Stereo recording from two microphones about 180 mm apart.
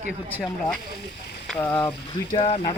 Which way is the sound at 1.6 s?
15° left (ahead or behind).